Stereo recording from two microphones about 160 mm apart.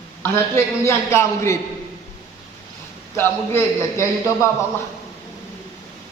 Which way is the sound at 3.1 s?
15° left (ahead or behind).